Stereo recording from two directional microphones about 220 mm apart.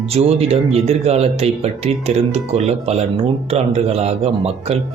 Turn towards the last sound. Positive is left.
turn(degrees=-30)  # may be behind; listen again after turning